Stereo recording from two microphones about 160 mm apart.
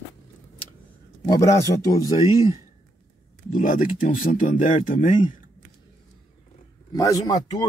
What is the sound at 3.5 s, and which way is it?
Speech, 55° left (ahead or behind).